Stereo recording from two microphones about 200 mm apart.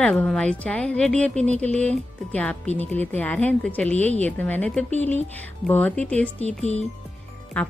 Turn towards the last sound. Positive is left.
turn(degrees=5)  # may be behind; listen again after turning